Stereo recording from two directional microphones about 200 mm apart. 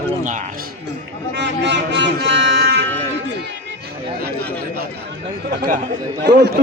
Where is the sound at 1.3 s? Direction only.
60° right (ahead or behind).